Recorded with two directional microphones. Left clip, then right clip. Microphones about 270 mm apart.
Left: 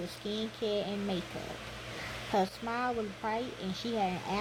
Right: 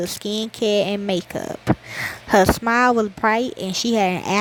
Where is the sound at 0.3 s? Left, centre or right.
Right.